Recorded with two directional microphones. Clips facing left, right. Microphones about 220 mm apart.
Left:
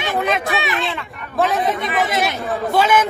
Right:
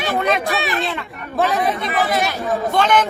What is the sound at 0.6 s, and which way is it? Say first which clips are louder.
Speech: right 1 dB; 40° right (ahead or behind).